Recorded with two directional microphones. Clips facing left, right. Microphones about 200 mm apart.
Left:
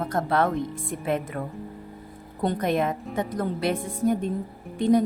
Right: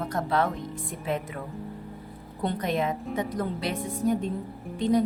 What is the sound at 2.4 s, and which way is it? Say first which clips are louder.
Speech: left 3 dB; 50° left (ahead or behind).